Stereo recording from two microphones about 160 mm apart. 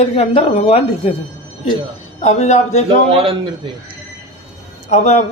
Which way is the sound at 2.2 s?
45° left (ahead or behind).